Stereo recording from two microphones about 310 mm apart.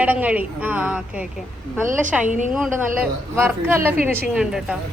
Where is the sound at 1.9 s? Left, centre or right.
Right.